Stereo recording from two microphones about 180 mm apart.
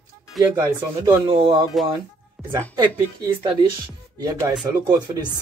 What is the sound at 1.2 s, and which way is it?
Speech, 30° right (ahead or behind).